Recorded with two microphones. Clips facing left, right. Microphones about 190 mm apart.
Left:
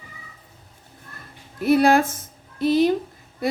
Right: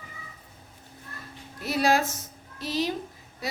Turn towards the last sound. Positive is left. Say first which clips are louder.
# left 10 dB
turn(degrees=55)  # may be behind; listen again after turning